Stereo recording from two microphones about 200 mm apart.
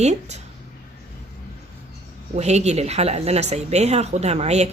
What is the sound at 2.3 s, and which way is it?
Speech, 35° right (ahead or behind).